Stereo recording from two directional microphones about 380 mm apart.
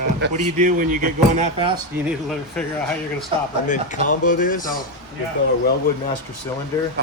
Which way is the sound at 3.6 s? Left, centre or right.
Centre.